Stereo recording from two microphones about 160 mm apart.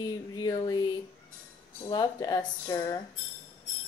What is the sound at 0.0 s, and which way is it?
A woman's voice, 25° left (ahead or behind).